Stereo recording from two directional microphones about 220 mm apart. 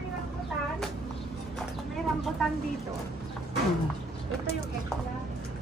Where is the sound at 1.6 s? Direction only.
Centre (ahead or behind).